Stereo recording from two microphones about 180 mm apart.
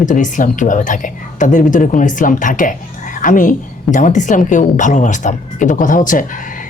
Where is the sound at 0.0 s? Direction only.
45° left (ahead or behind).